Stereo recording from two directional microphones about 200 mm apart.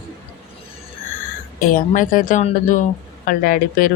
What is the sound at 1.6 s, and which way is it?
Speech, 40° left (ahead or behind).